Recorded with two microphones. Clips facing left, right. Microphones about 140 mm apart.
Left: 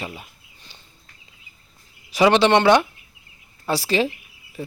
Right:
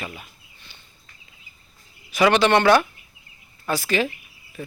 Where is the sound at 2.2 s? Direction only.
25° left (ahead or behind).